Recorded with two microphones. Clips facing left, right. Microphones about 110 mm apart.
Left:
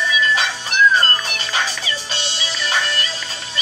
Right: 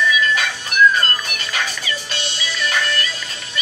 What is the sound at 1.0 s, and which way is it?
Music, 30° left (ahead or behind).